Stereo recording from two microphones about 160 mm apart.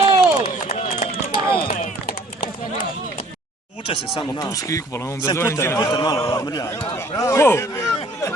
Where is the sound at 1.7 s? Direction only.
50° left (ahead or behind).